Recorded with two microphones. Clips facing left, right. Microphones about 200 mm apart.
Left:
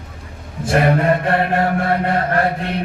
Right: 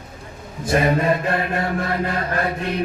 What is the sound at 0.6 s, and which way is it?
Mantra, 65° left (ahead or behind).